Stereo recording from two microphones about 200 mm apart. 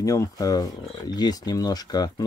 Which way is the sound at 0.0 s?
15° left (ahead or behind).